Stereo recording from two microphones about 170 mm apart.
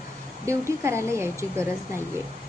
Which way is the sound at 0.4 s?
15° right (ahead or behind).